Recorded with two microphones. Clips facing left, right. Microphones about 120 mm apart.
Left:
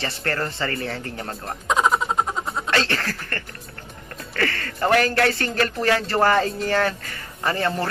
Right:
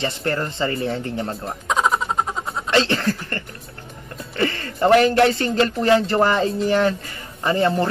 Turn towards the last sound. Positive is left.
turn(degrees=-20)  # may be behind; listen again after turning